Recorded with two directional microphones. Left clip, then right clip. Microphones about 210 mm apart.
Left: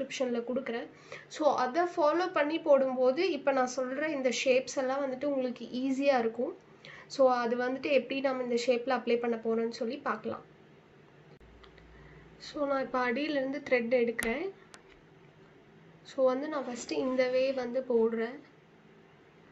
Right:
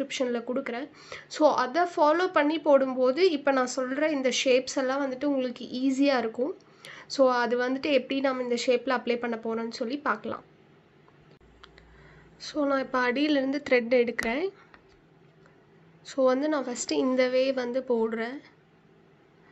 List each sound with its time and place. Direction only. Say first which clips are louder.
0.1 s speech: right 3 dB; 50° right (ahead or behind)
12.4 s speech: right 4 dB; 50° right (ahead or behind)
16.1 s speech: right 5 dB; 50° right (ahead or behind)